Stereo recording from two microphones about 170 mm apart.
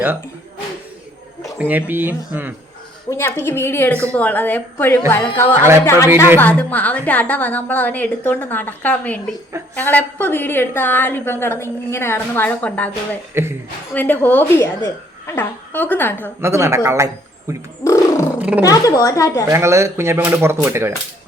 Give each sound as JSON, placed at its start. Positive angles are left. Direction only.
{"t": 1.5, "sound": "speech", "side_deg": -10}
{"t": 3.1, "sound": "a woman's voice", "side_deg": 15}
{"t": 13.4, "sound": "speech", "side_deg": -15}
{"t": 13.9, "sound": "a woman's voice", "side_deg": 10}
{"t": 16.4, "sound": "speech", "side_deg": -15}
{"t": 17.8, "sound": "a sound", "side_deg": 20}
{"t": 18.3, "sound": "purr", "side_deg": -10}
{"t": 18.6, "sound": "speech", "side_deg": 20}
{"t": 19.5, "sound": "speech", "side_deg": -15}